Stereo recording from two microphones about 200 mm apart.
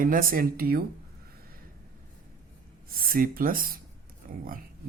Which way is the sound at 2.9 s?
45° right (ahead or behind).